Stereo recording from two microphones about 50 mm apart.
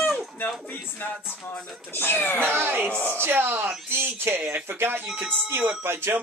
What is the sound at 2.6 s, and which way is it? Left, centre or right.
Speech, right.